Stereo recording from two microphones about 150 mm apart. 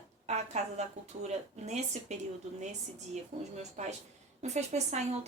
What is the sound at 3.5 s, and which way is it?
A woman's voice, 50° right (ahead or behind).